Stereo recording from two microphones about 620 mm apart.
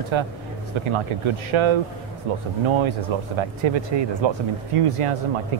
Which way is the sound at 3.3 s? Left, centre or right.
Right.